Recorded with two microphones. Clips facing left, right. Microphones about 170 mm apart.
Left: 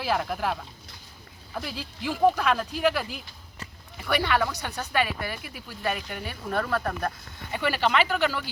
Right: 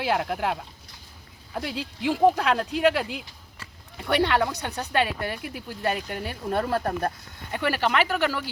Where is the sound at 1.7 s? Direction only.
25° right (ahead or behind).